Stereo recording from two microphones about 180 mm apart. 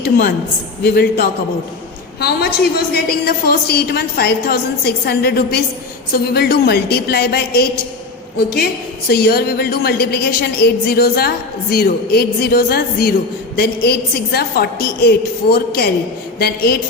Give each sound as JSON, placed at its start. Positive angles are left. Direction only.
{"t": 0.0, "sound": "a woman's voice", "side_deg": 55}
{"t": 14.3, "sound": "a woman's voice", "side_deg": 60}